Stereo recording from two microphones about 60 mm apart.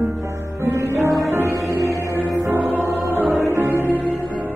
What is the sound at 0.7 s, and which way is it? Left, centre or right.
Music, right.